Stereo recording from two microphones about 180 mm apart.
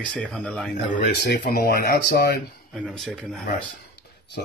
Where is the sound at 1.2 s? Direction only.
65° left (ahead or behind).